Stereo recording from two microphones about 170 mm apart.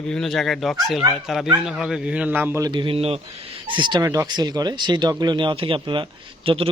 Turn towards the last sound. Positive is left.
turn(degrees=-35)  # may be behind; listen again after turning